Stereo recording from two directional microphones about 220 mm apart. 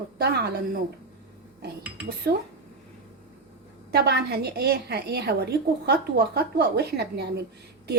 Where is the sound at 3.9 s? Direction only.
50° right (ahead or behind).